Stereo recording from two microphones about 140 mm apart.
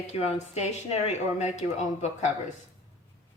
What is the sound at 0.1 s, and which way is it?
Speech, 50° left (ahead or behind).